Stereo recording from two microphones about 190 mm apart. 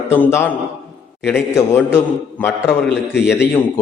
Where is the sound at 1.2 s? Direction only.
10° left (ahead or behind).